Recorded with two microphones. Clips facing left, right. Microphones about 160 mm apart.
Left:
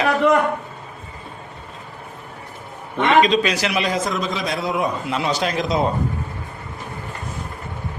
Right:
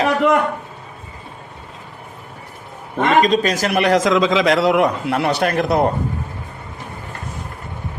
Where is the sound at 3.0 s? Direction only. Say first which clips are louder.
Right 1 dB; 45° right (ahead or behind); by 5.9 s 60° right (ahead or behind).